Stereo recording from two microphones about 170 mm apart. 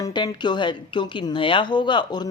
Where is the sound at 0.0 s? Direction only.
25° left (ahead or behind).